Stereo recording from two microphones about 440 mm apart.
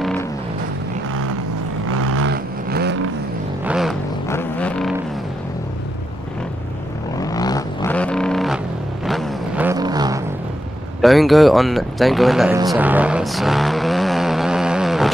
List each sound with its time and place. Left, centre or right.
0.0 s vehicle: centre
1.9 s vehicle: right
3.6 s vehicle: centre
7.2 s vehicle: centre
11.0 s speech: centre